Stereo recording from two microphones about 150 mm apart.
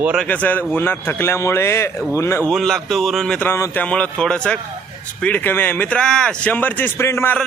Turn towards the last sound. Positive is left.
turn(degrees=15)  # may be behind; listen again after turning